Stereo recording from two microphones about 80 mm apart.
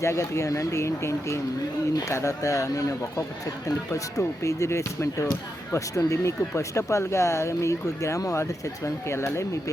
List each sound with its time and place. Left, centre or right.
0.0 s speech: left